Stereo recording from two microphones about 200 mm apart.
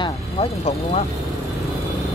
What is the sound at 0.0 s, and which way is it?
Speech, 30° left (ahead or behind).